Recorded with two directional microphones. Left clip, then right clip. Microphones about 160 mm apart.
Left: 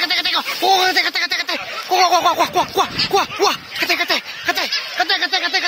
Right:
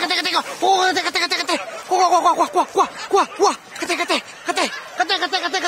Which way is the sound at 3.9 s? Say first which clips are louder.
Left 1 dB; 5° right (ahead or behind).